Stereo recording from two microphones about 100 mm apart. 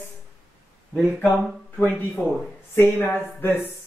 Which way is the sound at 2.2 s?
5° left (ahead or behind).